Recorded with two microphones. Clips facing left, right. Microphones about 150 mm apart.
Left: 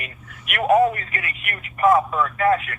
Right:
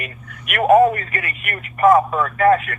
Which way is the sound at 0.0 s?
55° right (ahead or behind).